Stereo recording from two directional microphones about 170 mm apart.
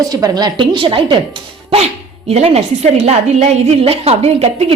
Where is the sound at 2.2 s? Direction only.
40° right (ahead or behind).